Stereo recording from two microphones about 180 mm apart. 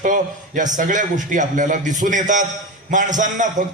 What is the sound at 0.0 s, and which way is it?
A man's voice, 45° right (ahead or behind).